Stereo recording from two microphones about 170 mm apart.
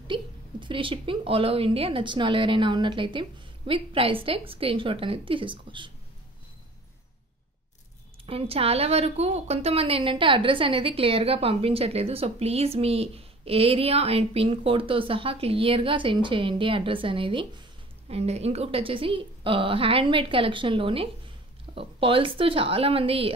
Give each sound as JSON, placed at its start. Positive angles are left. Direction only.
{"t": 0.1, "sound": "a woman's voice", "side_deg": -30}
{"t": 8.3, "sound": "a woman's voice", "side_deg": -35}